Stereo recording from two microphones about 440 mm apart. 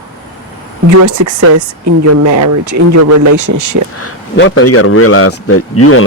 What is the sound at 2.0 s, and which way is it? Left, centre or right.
Speech, right.